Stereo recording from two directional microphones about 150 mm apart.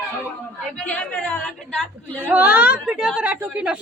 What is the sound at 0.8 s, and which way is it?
Speech, 10° left (ahead or behind).